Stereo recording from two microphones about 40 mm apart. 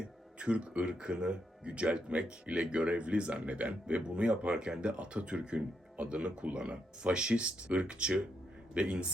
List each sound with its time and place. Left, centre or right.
0.0 s speech: right